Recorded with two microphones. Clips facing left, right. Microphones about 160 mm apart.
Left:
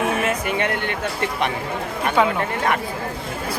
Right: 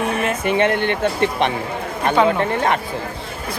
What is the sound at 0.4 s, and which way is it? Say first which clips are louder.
Speech: right 6 dB; 25° right (ahead or behind).